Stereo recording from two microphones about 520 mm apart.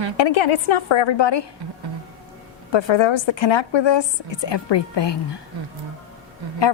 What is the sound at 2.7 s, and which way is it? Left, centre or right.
A woman's voice, left.